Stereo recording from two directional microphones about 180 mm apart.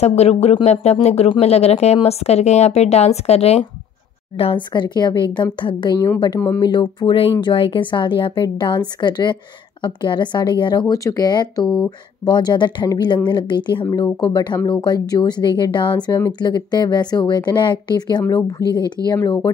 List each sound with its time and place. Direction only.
0.0 s a woman's voice: 35° left (ahead or behind)
11.6 s speech: 5° left (ahead or behind)
12.3 s a woman's voice: 25° left (ahead or behind)